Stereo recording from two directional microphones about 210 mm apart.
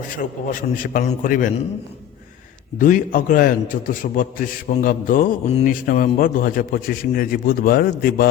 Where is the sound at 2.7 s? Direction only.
40° left (ahead or behind).